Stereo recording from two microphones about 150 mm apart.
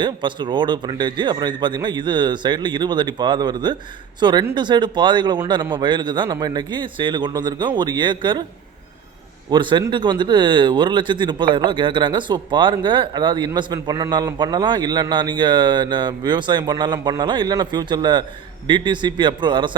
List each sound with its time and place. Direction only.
0.0 s speech: 30° right (ahead or behind)
9.5 s speech: 30° right (ahead or behind)